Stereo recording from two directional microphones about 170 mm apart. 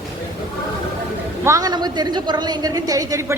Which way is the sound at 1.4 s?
20° right (ahead or behind).